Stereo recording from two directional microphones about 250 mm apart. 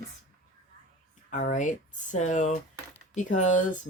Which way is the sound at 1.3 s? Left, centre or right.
Left.